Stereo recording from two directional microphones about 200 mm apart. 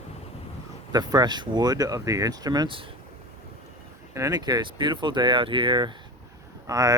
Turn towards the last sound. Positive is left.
turn(degrees=-15)  # may be behind; listen again after turning